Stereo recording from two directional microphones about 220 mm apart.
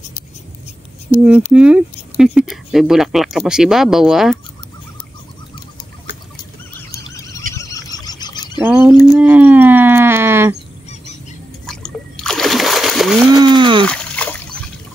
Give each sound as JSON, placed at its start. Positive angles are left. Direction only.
{"t": 1.5, "sound": "speech", "side_deg": -5}
{"t": 6.9, "sound": "squeal", "side_deg": 15}
{"t": 7.5, "sound": "a sound", "side_deg": 15}
{"t": 8.5, "sound": "speech", "side_deg": -5}
{"t": 11.6, "sound": "splash", "side_deg": 0}
{"t": 13.3, "sound": "speech", "side_deg": -20}
{"t": 13.8, "sound": "splash", "side_deg": 5}